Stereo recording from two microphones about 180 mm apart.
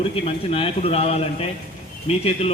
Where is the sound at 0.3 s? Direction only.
30° left (ahead or behind).